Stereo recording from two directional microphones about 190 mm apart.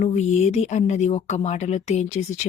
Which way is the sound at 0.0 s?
35° left (ahead or behind).